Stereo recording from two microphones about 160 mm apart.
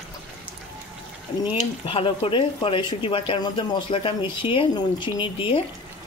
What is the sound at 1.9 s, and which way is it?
Speech, 35° left (ahead or behind).